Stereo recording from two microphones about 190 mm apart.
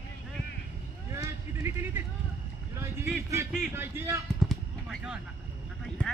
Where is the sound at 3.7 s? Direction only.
15° right (ahead or behind).